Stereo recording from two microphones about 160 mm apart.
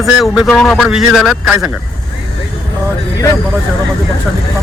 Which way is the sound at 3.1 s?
20° left (ahead or behind).